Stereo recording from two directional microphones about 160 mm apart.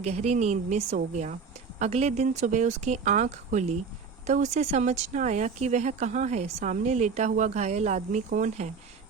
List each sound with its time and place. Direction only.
0.0 s speech: 40° right (ahead or behind)